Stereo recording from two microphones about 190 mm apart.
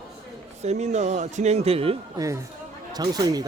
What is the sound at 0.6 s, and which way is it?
Speech, 35° right (ahead or behind).